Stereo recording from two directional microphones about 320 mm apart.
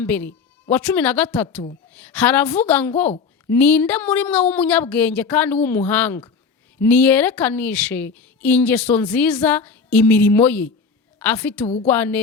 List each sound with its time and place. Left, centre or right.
0.0 s a woman's voice: centre